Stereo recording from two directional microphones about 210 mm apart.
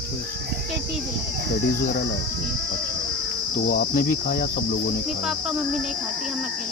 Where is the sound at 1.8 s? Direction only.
45° left (ahead or behind).